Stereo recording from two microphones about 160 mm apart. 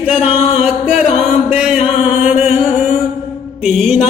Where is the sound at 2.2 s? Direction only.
5° right (ahead or behind).